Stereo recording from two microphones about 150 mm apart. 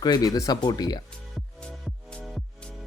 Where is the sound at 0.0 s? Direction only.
25° left (ahead or behind).